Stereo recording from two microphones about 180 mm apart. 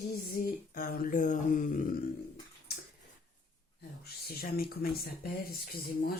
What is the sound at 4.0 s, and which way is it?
Speech, 55° left (ahead or behind).